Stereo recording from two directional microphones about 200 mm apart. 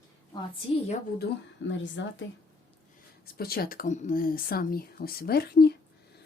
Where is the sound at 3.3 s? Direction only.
50° left (ahead or behind).